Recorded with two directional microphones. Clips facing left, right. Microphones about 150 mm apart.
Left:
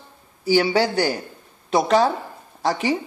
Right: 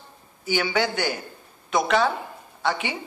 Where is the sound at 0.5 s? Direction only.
35° left (ahead or behind).